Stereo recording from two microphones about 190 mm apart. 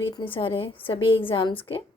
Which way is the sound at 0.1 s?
25° left (ahead or behind).